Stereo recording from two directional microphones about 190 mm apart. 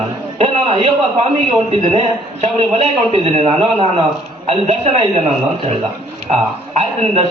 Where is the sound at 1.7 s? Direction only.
30° right (ahead or behind).